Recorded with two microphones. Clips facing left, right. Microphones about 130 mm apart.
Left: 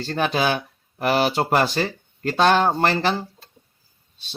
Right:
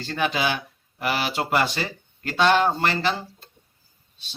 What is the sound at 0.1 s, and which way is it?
Speech, 40° left (ahead or behind).